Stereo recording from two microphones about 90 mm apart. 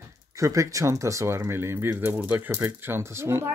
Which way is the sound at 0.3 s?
35° right (ahead or behind).